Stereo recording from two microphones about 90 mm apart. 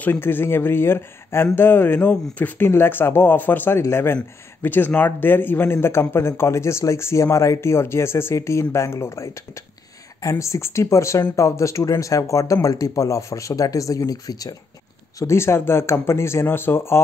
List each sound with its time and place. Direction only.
0.0 s speech: 25° left (ahead or behind); by 14.5 s 45° left (ahead or behind)
15.1 s speech: 30° left (ahead or behind)